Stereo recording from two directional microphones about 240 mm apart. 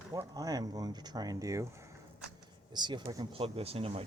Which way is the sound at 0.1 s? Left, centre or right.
Centre.